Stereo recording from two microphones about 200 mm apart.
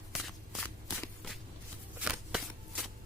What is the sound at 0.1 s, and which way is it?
Shuffling cards, centre (ahead or behind).